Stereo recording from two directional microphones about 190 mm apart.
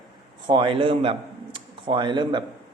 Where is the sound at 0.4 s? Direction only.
25° right (ahead or behind).